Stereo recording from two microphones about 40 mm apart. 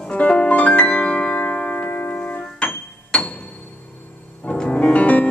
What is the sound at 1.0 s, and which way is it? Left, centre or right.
Tubular bells, left.